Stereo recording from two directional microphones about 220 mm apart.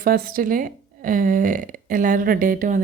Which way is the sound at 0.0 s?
40° right (ahead or behind).